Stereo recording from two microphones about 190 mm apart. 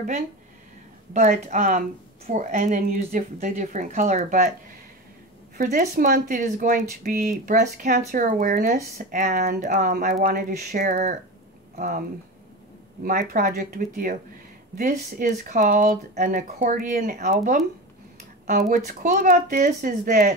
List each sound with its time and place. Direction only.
1.1 s a woman's voice: 40° right (ahead or behind)
5.6 s a woman's voice: 45° right (ahead or behind)
13.0 s speech: 45° right (ahead or behind)
18.9 s speech: 45° right (ahead or behind)